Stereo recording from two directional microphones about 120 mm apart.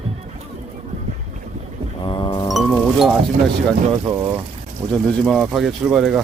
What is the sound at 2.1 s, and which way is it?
Music, 40° left (ahead or behind).